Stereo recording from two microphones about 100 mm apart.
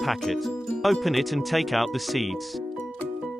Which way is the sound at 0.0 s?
Centre (ahead or behind).